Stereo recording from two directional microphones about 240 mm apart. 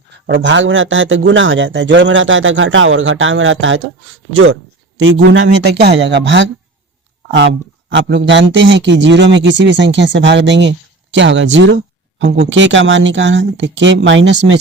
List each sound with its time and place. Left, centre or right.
0.3 s a man's voice: right
4.9 s a man's voice: right